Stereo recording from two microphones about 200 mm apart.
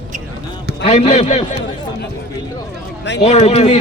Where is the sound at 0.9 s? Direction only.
35° left (ahead or behind).